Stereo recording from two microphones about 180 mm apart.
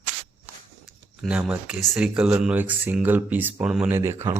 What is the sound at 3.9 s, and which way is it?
Speech, 15° right (ahead or behind).